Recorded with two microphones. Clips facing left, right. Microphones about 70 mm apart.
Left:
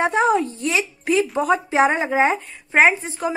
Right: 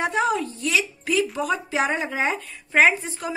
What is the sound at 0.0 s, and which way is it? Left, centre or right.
Speech, left.